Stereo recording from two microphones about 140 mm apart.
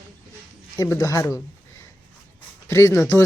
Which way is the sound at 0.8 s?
25° left (ahead or behind).